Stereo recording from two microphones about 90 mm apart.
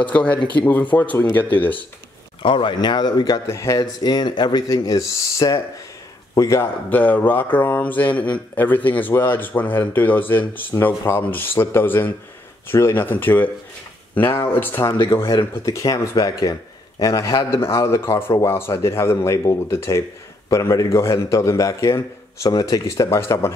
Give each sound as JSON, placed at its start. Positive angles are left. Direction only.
{"t": 0.0, "sound": "speech", "side_deg": 15}
{"t": 2.4, "sound": "speech", "side_deg": 70}
{"t": 3.4, "sound": "a man's voice", "side_deg": 35}
{"t": 3.8, "sound": "a man's voice", "side_deg": 50}
{"t": 6.9, "sound": "a man's voice", "side_deg": 20}